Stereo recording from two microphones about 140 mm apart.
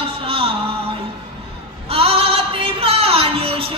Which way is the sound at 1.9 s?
40° right (ahead or behind).